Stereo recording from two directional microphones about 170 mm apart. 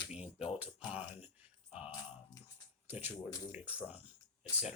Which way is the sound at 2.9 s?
10° right (ahead or behind).